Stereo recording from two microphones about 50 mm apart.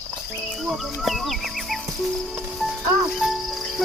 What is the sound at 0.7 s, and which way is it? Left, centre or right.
Speech, centre.